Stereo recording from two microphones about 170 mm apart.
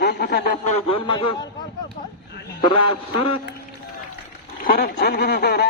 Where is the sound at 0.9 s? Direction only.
30° left (ahead or behind).